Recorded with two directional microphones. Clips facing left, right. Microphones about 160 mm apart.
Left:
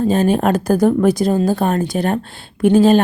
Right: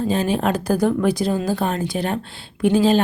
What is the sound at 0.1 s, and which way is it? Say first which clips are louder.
Speech: left 4 dB; 45° left (ahead or behind).